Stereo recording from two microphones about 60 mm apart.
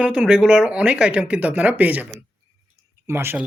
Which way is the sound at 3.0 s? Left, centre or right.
Right.